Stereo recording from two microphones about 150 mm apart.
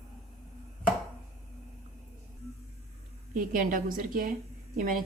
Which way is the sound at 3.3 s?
65° right (ahead or behind).